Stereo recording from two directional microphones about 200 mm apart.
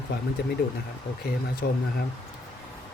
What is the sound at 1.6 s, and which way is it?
Speech, 50° left (ahead or behind).